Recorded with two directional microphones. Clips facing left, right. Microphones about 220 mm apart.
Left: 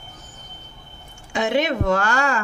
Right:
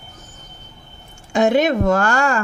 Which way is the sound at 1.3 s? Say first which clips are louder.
Right 5 dB; 45° right (ahead or behind).